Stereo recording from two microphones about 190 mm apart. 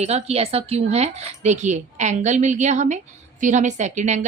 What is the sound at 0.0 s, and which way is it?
A woman's voice, 35° right (ahead or behind).